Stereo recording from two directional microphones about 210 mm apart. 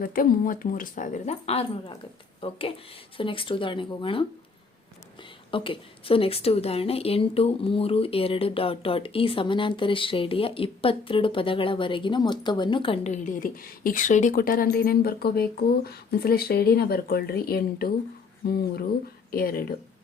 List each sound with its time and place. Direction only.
0.0 s a woman's voice: 45° left (ahead or behind); by 4.3 s 25° left (ahead or behind)
5.5 s a woman's voice: 25° left (ahead or behind)
13.2 s speech: 45° left (ahead or behind)